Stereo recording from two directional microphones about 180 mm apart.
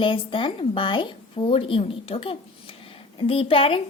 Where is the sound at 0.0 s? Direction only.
30° left (ahead or behind).